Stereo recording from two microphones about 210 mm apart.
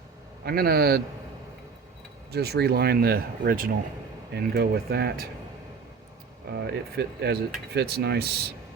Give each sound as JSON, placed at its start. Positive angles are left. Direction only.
{"t": 0.4, "sound": "speech", "side_deg": -45}
{"t": 2.3, "sound": "speech", "side_deg": -50}
{"t": 6.5, "sound": "speech", "side_deg": -50}